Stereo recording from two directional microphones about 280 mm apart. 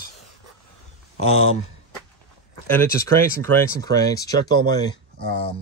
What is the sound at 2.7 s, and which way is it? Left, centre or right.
Speech, centre.